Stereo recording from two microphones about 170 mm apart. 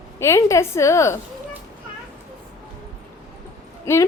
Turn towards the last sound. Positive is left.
turn(degrees=15)  # may be behind; listen again after turning